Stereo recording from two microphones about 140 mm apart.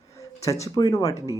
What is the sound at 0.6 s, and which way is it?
Speech, 25° left (ahead or behind).